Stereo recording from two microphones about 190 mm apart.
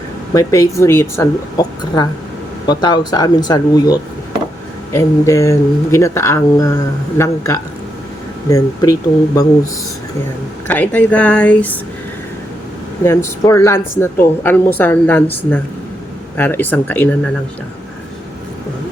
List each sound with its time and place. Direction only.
0.3 s speech: 15° left (ahead or behind)
10.7 s speech: 10° left (ahead or behind)
13.1 s speech: 15° left (ahead or behind)